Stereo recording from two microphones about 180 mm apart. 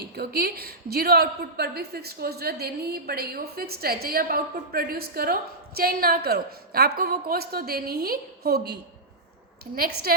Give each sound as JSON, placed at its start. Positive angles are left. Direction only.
{"t": 0.0, "sound": "a woman's voice", "side_deg": -60}